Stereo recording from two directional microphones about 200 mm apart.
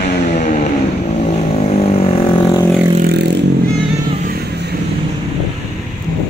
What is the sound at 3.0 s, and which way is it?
Vehicle, 55° right (ahead or behind).